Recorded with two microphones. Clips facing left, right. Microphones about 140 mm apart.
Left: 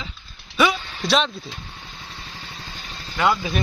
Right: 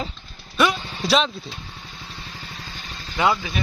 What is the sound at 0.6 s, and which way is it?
Vehicle, centre (ahead or behind).